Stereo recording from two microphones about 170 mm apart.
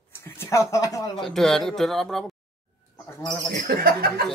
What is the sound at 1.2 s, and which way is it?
A man's voice, centre (ahead or behind).